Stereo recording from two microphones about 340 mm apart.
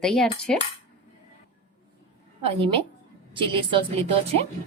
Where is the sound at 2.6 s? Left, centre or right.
Centre.